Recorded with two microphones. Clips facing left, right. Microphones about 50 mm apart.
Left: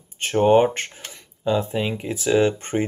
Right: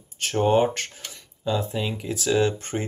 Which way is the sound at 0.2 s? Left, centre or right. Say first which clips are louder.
Left 4 dB; left.